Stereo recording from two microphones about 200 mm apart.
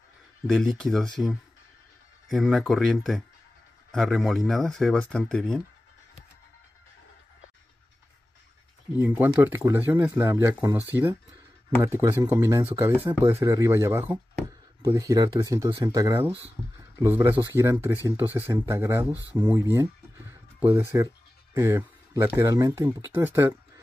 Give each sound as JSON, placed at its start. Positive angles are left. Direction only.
{"t": 0.5, "sound": "speech", "side_deg": 0}
{"t": 9.0, "sound": "speech", "side_deg": -10}
{"t": 20.9, "sound": "speech", "side_deg": -15}